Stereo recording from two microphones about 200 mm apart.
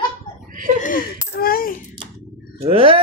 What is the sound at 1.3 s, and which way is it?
Speech, 45° left (ahead or behind).